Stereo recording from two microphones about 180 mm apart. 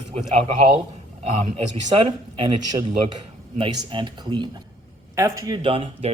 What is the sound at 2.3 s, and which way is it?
A man's voice, 25° right (ahead or behind).